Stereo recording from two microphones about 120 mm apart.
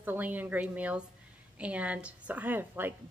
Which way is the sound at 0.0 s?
15° right (ahead or behind).